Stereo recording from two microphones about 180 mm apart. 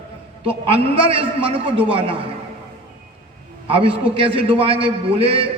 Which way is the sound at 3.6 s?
30° right (ahead or behind).